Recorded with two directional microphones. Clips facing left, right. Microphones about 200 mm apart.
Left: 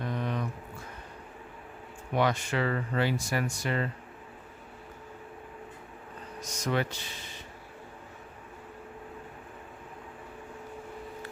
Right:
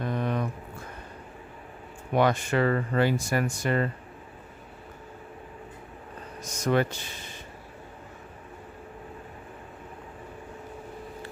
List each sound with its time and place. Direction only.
0.0 s a sound: 50° right (ahead or behind)
2.1 s speech: 50° right (ahead or behind)
6.7 s speech: 50° right (ahead or behind)